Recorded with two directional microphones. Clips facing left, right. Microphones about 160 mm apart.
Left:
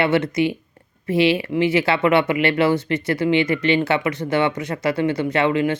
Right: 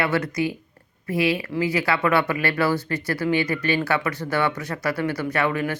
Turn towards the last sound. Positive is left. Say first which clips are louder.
# left 5 dB
turn(degrees=20)  # may be behind; listen again after turning